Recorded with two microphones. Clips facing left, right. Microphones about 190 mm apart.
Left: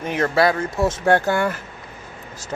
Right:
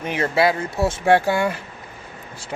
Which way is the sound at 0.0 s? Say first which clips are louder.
Left 1 dB; 10° right (ahead or behind).